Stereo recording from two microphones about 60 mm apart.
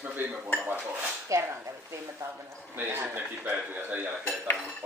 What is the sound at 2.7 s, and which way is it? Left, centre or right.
Speech, right.